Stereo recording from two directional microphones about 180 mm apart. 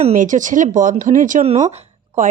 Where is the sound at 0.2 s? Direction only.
45° right (ahead or behind).